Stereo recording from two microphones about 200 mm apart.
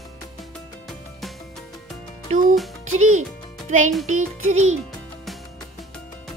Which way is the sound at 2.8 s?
90° right.